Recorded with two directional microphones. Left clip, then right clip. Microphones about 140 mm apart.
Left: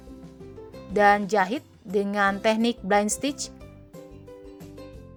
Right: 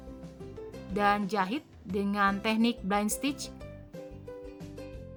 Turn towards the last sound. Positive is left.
turn(degrees=35)  # may be behind; listen again after turning